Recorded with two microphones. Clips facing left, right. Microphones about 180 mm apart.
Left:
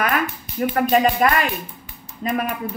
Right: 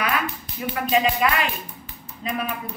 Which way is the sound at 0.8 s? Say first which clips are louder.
Left 2 dB; 50° left (ahead or behind).